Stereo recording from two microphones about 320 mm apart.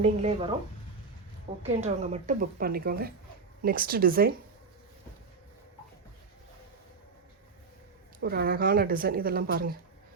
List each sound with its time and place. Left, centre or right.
0.0 s speech: centre
1.6 s speech: right
8.2 s speech: right